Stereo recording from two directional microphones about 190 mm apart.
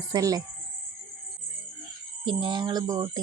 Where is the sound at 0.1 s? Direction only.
20° right (ahead or behind).